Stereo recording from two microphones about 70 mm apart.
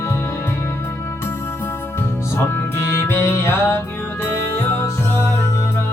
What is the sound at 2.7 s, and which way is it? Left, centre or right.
Music, left.